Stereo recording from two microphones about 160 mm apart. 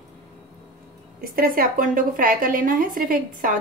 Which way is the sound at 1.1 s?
65° right (ahead or behind).